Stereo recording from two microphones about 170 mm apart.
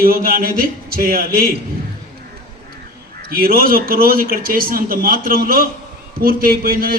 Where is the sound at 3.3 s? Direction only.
60° right (ahead or behind).